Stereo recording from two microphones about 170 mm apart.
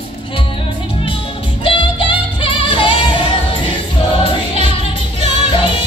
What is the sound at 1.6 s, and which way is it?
Music, 30° left (ahead or behind).